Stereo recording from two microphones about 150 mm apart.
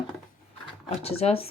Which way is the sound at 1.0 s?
40° left (ahead or behind).